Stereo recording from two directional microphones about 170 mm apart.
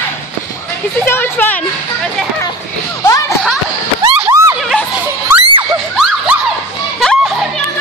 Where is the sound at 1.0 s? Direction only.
10° left (ahead or behind).